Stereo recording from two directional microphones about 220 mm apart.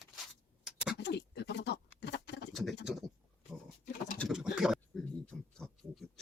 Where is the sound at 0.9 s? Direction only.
50° left (ahead or behind).